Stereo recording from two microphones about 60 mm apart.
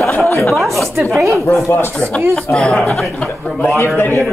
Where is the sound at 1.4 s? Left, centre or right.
Left.